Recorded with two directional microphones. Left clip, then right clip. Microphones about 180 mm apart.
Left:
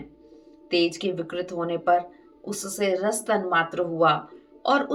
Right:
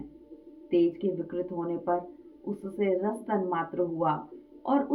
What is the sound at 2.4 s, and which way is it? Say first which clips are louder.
Speech: left 3 dB; 20° left (ahead or behind).